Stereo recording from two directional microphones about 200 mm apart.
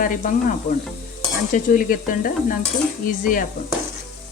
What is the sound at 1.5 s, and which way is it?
Speech, 45° left (ahead or behind).